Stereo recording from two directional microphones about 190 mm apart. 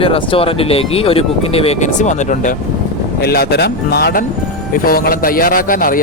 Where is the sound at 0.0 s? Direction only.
30° left (ahead or behind).